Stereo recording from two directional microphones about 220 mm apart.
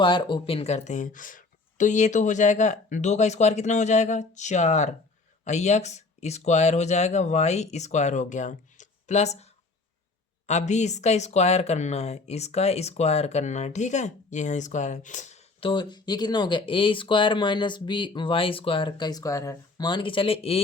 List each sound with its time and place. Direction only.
0.0 s speech: 20° left (ahead or behind)